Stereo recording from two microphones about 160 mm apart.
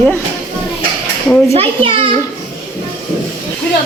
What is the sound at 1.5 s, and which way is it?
Speech, 35° right (ahead or behind).